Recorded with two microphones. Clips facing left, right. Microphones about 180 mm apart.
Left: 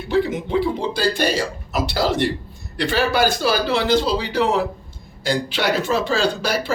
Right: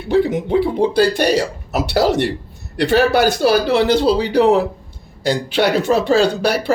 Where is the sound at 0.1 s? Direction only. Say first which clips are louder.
Right 4 dB; 60° right (ahead or behind).